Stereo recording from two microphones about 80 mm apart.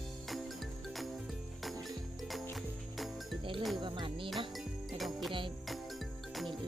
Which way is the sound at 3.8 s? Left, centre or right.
Right.